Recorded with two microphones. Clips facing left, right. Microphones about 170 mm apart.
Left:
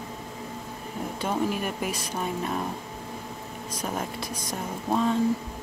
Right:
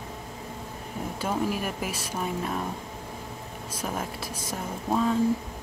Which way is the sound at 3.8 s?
5° right (ahead or behind).